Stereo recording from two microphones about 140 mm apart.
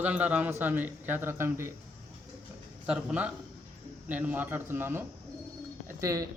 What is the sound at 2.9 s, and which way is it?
Speech, 10° right (ahead or behind).